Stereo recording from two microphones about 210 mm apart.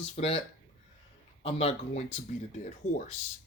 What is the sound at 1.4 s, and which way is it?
Speech, 25° left (ahead or behind).